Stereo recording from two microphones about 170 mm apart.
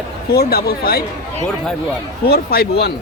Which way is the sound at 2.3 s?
65° left (ahead or behind).